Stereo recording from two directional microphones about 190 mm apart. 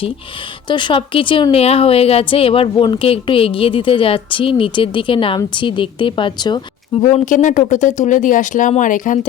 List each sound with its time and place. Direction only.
0.7 s a woman's voice: 25° left (ahead or behind)
7.0 s speech: 40° left (ahead or behind)